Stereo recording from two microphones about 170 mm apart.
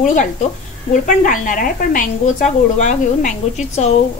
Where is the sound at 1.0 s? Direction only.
50° left (ahead or behind).